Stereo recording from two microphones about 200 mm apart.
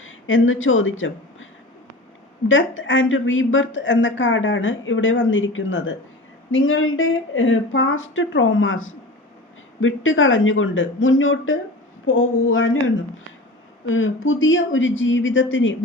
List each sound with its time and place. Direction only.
0.0 s speech: 75° left (ahead or behind)
2.5 s a woman's voice: 75° left (ahead or behind)